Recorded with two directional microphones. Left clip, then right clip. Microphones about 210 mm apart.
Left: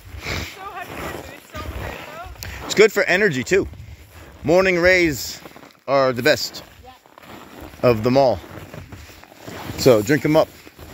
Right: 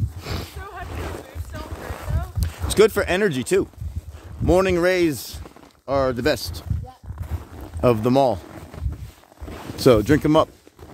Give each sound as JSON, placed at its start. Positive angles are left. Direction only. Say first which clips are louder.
{"t": 0.2, "sound": "a sound", "louder": "left 6 dB", "side_deg": -25}
{"t": 0.8, "sound": "boat", "louder": "left 3 dB", "side_deg": 60}
{"t": 2.4, "sound": "a sound", "louder": "left 3 dB", "side_deg": -20}
{"t": 2.7, "sound": "speech", "louder": "left 2 dB", "side_deg": -25}
{"t": 7.8, "sound": "speech", "louder": "left 2 dB", "side_deg": -20}
{"t": 9.8, "sound": "speech", "louder": "left 1 dB", "side_deg": -25}